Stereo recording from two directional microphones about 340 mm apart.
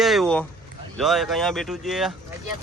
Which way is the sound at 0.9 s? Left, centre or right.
Centre.